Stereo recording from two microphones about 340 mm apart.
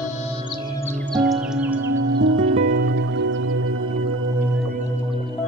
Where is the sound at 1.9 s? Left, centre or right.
Right.